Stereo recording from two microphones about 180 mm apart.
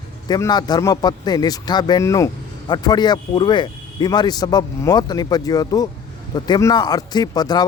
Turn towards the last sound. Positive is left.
turn(degrees=20)  # may be behind; listen again after turning